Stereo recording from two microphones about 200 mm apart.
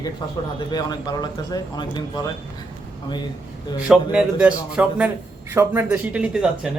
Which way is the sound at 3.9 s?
5° right (ahead or behind).